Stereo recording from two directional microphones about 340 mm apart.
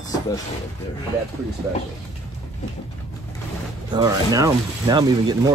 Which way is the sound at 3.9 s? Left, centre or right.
Centre.